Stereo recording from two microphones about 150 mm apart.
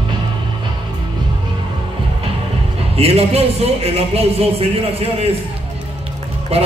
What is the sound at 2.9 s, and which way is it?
A man's voice, 40° right (ahead or behind).